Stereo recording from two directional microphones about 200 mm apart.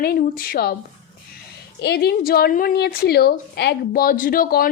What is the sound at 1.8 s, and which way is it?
A woman's voice, 55° left (ahead or behind).